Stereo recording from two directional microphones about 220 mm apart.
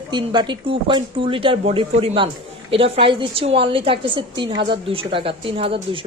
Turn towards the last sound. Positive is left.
turn(degrees=-25)  # may be behind; listen again after turning